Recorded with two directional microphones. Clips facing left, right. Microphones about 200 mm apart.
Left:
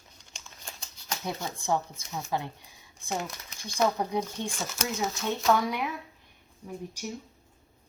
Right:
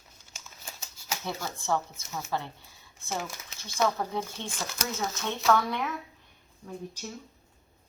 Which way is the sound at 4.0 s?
15° left (ahead or behind).